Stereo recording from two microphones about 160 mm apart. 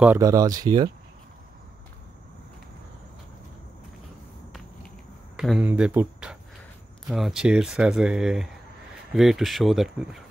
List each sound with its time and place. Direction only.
0.2 s speech: 20° right (ahead or behind)
5.4 s speech: 5° right (ahead or behind)